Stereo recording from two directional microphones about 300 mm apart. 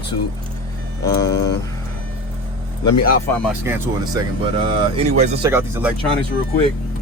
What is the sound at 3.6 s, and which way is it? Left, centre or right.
Speech, centre.